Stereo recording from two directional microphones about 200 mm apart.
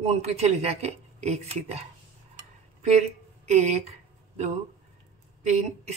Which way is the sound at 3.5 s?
35° right (ahead or behind).